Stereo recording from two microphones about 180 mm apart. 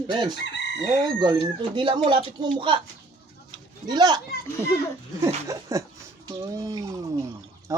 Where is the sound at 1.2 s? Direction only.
25° right (ahead or behind).